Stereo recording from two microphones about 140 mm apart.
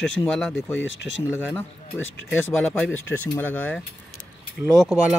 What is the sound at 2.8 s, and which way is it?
Speech, 15° left (ahead or behind).